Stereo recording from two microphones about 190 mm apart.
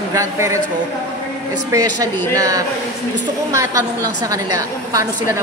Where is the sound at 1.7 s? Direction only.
20° right (ahead or behind).